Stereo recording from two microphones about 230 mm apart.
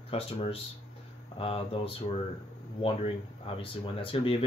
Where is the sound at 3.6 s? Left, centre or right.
Left.